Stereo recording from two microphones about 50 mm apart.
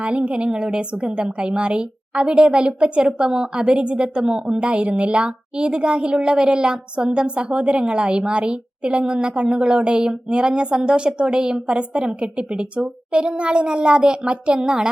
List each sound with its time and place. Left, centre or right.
0.0 s a woman's voice: right